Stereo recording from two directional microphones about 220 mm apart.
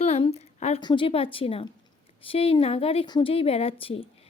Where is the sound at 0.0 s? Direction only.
30° left (ahead or behind).